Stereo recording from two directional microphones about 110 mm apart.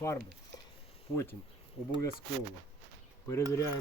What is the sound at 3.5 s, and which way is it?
Speech, 25° left (ahead or behind).